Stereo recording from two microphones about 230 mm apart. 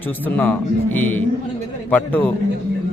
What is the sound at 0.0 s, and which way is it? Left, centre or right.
A man's voice, centre.